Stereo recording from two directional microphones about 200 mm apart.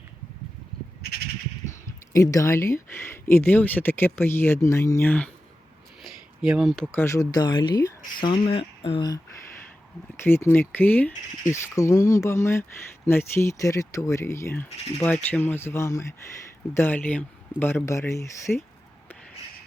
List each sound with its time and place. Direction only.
2.1 s speech: 15° left (ahead or behind)
6.0 s a sound: centre (ahead or behind)
7.0 s speech: 15° left (ahead or behind)
10.2 s speech: 10° left (ahead or behind)